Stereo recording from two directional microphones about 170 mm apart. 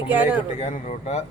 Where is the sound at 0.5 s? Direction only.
40° left (ahead or behind).